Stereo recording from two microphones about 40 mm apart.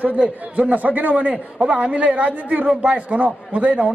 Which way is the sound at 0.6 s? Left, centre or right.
Right.